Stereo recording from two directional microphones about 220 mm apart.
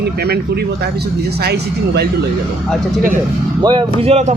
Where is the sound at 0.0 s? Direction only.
45° right (ahead or behind).